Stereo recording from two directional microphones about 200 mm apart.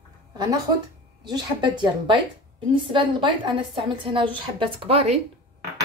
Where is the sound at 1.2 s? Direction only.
20° right (ahead or behind).